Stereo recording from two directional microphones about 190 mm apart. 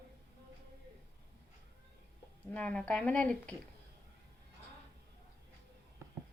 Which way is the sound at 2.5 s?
5° left (ahead or behind).